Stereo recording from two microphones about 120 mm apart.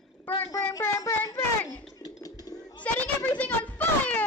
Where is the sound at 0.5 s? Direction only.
25° left (ahead or behind).